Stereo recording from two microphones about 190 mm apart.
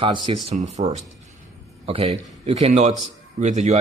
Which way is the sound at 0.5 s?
40° right (ahead or behind).